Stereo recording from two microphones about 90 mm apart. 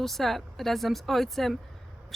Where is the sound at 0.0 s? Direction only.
Centre (ahead or behind).